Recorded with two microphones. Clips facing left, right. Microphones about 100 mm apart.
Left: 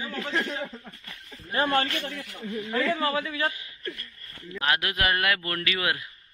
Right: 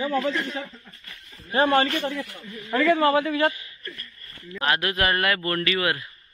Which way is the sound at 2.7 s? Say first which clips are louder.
Right 7 dB; 80° right.